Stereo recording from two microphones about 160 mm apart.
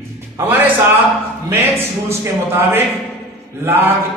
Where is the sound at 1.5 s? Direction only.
15° right (ahead or behind).